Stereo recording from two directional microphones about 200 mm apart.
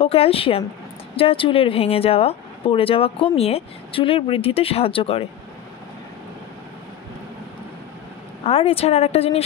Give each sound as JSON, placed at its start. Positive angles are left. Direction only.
{"t": 0.0, "sound": "speech", "side_deg": 30}
{"t": 8.5, "sound": "speech", "side_deg": 30}